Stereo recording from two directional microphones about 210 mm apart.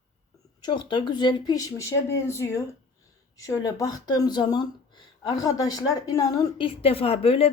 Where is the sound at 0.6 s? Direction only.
20° left (ahead or behind).